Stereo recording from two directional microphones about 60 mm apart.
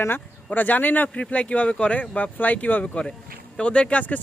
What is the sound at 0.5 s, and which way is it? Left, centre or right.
Speech, left.